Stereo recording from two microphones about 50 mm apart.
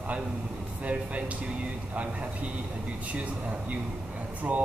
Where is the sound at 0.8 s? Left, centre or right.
Right.